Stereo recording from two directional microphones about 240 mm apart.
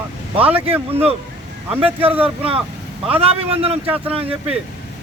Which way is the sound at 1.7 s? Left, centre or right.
Right.